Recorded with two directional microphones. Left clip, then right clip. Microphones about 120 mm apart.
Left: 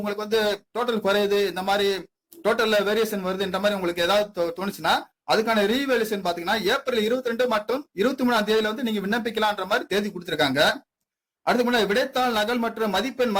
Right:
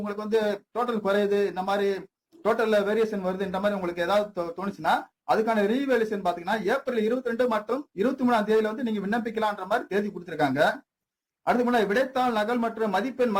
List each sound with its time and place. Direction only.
0.0 s a man's voice: 15° left (ahead or behind)